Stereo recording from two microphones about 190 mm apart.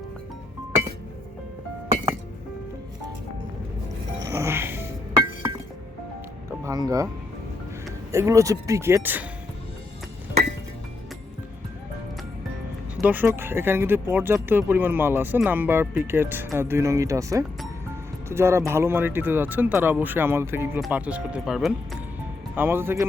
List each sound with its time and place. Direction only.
4.2 s music: 15° right (ahead or behind)
6.7 s speech: 20° right (ahead or behind)
8.1 s speech: 15° right (ahead or behind)
13.0 s speech: 10° right (ahead or behind)